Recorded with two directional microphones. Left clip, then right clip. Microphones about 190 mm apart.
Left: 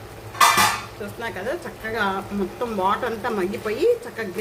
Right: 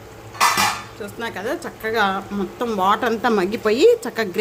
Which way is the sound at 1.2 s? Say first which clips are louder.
Right 2 dB; 65° right (ahead or behind).